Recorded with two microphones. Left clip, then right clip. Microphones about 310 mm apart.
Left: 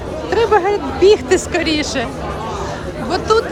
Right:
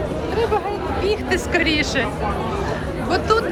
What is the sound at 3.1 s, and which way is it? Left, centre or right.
Speech, centre.